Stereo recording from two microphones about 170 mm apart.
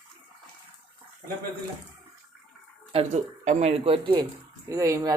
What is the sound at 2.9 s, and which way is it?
A woman's voice, 40° right (ahead or behind).